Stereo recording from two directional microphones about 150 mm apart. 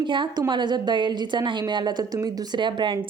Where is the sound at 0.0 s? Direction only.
30° right (ahead or behind).